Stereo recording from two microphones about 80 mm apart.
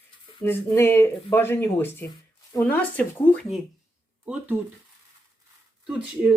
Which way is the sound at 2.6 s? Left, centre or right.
Centre.